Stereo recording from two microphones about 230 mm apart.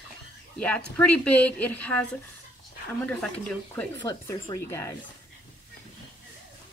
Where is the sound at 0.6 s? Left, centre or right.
Centre.